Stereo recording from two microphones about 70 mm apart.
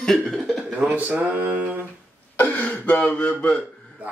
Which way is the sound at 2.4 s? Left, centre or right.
Left.